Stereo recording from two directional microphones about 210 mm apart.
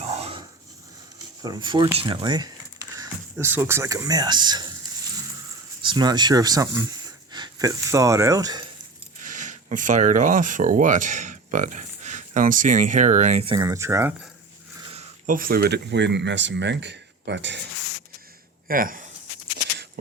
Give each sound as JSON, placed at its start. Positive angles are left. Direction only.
{"t": 0.2, "sound": "dog", "side_deg": -25}
{"t": 1.4, "sound": "speech", "side_deg": -20}
{"t": 5.8, "sound": "speech", "side_deg": -20}
{"t": 9.2, "sound": "speech", "side_deg": -35}
{"t": 14.9, "sound": "speech", "side_deg": -40}
{"t": 18.7, "sound": "speech", "side_deg": -40}